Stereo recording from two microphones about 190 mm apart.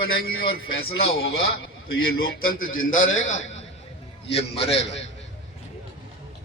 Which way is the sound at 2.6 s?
90° left.